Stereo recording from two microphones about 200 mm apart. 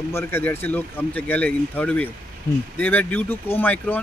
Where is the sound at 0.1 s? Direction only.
10° left (ahead or behind).